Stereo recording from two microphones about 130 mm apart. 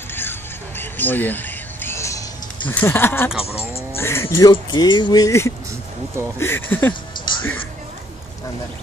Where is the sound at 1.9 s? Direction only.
20° left (ahead or behind).